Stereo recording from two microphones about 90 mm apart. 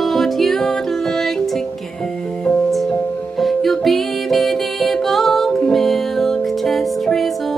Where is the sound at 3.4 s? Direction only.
Centre (ahead or behind).